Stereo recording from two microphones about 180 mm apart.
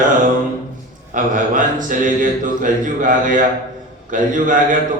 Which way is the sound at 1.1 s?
45° right (ahead or behind).